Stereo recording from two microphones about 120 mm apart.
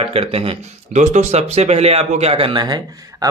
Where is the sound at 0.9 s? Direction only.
80° right; by 3.3 s 35° right (ahead or behind).